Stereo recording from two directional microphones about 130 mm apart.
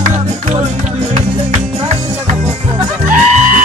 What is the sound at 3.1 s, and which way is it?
Music, 75° right (ahead or behind).